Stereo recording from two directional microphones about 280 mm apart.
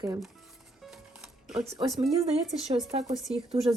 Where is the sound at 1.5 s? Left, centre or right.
Centre.